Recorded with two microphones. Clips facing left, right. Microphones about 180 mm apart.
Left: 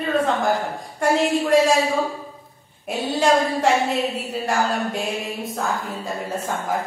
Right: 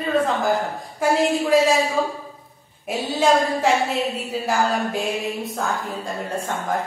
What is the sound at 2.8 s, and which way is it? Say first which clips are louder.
A woman's voice: even; centre (ahead or behind).